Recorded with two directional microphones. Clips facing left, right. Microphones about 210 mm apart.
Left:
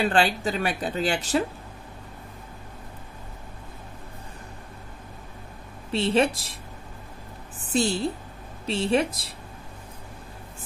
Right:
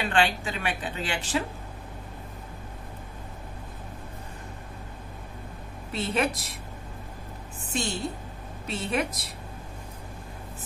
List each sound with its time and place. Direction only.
0.0 s speech: 35° left (ahead or behind)
5.9 s speech: 30° left (ahead or behind)
7.7 s speech: 35° left (ahead or behind)